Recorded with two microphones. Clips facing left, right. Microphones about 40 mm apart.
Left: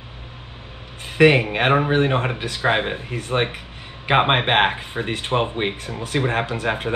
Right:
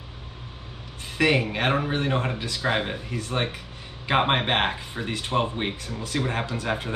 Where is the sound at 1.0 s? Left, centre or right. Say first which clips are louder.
Left 7 dB; left.